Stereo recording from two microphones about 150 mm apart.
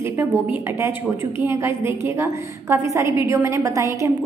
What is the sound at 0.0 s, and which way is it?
A woman's voice, 15° right (ahead or behind).